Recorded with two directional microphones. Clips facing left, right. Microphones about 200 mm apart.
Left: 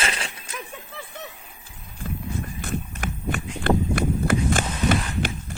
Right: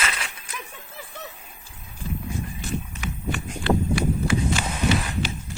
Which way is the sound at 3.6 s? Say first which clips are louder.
Even; 50° left (ahead or behind).